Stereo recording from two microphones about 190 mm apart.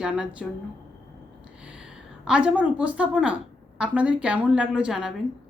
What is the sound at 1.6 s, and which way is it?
A woman's voice, 5° right (ahead or behind).